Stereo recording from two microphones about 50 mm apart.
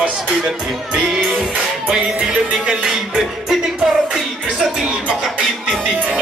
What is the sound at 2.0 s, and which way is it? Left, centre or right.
Music, right.